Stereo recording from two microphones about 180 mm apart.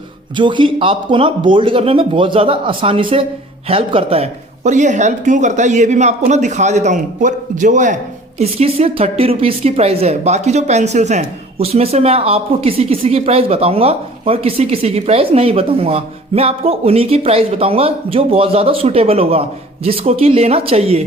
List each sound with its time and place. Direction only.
0.3 s a woman's voice: 25° right (ahead or behind)